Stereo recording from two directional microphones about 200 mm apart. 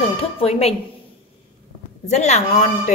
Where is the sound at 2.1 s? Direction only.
35° left (ahead or behind).